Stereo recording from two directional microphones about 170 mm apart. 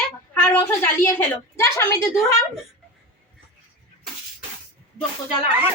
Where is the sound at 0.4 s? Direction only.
10° left (ahead or behind).